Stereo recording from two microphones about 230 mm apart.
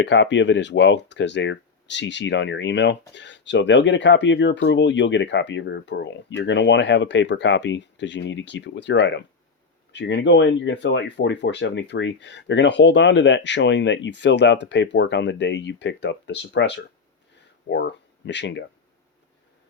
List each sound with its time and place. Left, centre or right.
0.0 s speech: left